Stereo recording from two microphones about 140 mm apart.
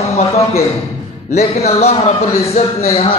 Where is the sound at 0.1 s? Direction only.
50° left (ahead or behind).